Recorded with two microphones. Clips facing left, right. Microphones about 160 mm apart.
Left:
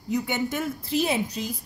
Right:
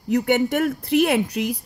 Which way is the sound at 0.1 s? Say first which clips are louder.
Right 7 dB; 70° right (ahead or behind).